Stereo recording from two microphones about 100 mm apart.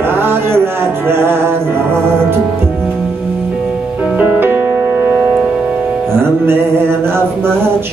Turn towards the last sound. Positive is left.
turn(degrees=-25)  # may be behind; listen again after turning